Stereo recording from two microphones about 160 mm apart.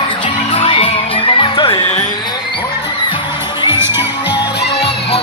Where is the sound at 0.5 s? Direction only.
35° left (ahead or behind).